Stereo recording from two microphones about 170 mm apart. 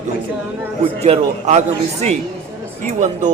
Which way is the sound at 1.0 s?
40° right (ahead or behind).